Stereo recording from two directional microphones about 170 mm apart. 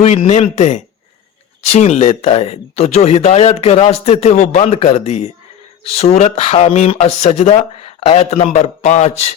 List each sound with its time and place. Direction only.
0.0 s speech: 40° left (ahead or behind)